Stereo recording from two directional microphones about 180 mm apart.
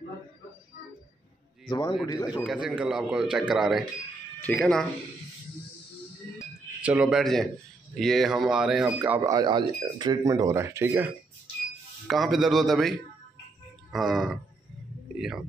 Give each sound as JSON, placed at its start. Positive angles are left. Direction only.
{"t": 1.7, "sound": "speech", "side_deg": 25}
{"t": 2.4, "sound": "speech", "side_deg": -5}
{"t": 6.3, "sound": "music", "side_deg": -5}
{"t": 7.9, "sound": "speech", "side_deg": 0}
{"t": 9.3, "sound": "speech", "side_deg": -25}
{"t": 12.1, "sound": "speech", "side_deg": 0}
{"t": 13.9, "sound": "speech", "side_deg": 0}